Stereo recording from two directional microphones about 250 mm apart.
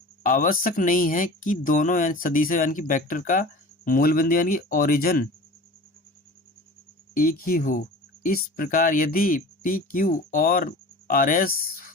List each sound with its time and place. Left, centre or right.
0.2 s speech: left
7.1 s speech: left